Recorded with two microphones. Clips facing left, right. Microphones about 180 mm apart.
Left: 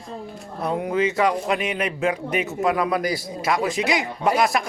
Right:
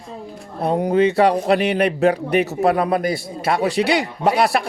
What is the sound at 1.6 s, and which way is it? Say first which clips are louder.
Speech: right 7 dB; 65° right (ahead or behind).